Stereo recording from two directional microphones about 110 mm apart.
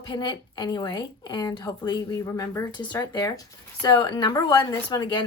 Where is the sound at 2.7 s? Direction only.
40° left (ahead or behind).